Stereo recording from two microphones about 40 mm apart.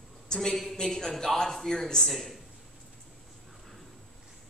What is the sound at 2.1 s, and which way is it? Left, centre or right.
Speech, centre.